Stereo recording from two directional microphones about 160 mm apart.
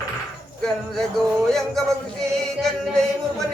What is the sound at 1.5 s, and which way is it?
Speech, centre (ahead or behind).